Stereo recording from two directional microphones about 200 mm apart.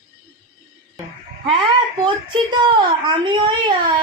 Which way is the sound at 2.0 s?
25° right (ahead or behind).